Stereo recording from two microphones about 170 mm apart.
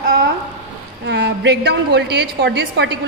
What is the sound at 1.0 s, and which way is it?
A woman's voice, 85° right.